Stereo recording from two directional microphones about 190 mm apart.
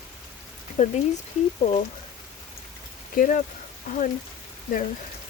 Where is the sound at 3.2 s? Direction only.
40° left (ahead or behind).